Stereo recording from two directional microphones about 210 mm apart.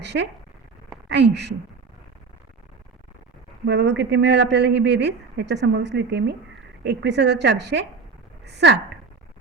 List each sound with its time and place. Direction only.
0.0 s speech: 55° right (ahead or behind)
3.7 s speech: 55° right (ahead or behind)